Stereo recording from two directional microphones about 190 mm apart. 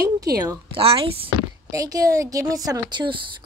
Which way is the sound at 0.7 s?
30° right (ahead or behind).